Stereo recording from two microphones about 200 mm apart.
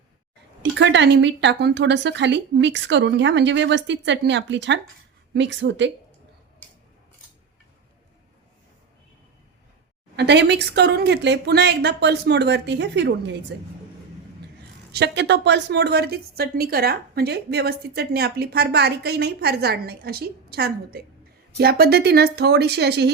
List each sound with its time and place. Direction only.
0.6 s a woman's voice: 60° right (ahead or behind)
10.2 s a woman's voice: 60° right (ahead or behind)
14.9 s a woman's voice: 60° right (ahead or behind)